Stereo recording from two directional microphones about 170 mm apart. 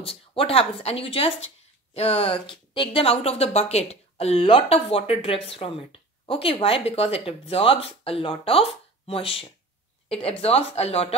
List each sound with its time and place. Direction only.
0.0 s speech: 35° left (ahead or behind)